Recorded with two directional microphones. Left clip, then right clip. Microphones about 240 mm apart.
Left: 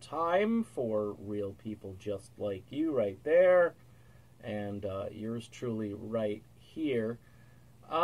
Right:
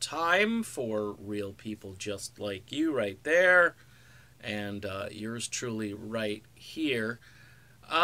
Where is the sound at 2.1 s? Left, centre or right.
Centre.